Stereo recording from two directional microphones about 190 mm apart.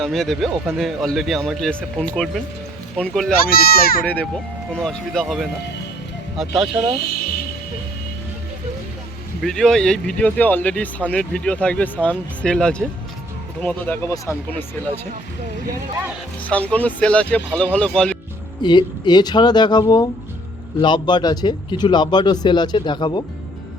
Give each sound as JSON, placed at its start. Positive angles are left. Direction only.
{"t": 0.0, "sound": "speech", "side_deg": 0}
{"t": 3.4, "sound": "speech", "side_deg": 50}
{"t": 4.0, "sound": "speech", "side_deg": 10}
{"t": 9.4, "sound": "speech", "side_deg": 0}
{"t": 16.4, "sound": "speech", "side_deg": 5}
{"t": 18.6, "sound": "speech", "side_deg": 25}